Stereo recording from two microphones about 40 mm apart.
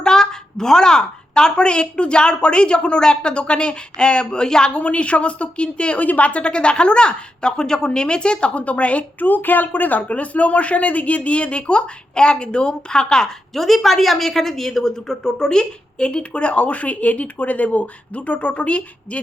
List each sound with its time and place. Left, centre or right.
0.0 s a woman's voice: centre
4.7 s a woman's voice: left
6.0 s a woman's voice: left
9.2 s a woman's voice: left; by 13.3 s centre
13.5 s a woman's voice: centre; by 19.2 s left